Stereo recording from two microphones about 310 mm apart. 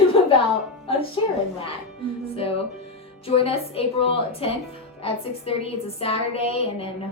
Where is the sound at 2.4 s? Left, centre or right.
Centre.